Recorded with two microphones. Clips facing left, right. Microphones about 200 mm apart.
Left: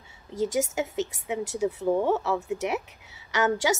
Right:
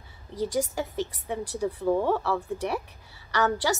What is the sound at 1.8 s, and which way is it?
Speech, 20° left (ahead or behind).